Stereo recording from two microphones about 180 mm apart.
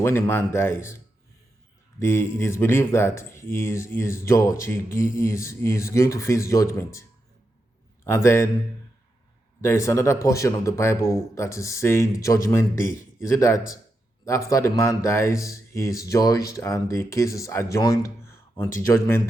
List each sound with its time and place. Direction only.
0.0 s speech: 15° left (ahead or behind)
2.0 s speech: 15° left (ahead or behind)
8.0 s speech: 15° left (ahead or behind)
9.6 s speech: 15° left (ahead or behind)